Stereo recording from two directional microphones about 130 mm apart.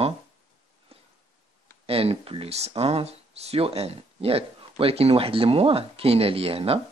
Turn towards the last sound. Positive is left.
turn(degrees=-50)  # may be behind; listen again after turning